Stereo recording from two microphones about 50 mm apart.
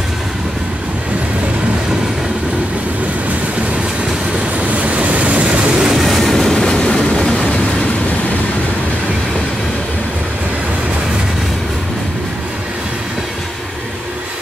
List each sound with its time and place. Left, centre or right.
4.6 s waves: right
5.8 s vehicle: centre
6.0 s train: centre
7.2 s vehicle: centre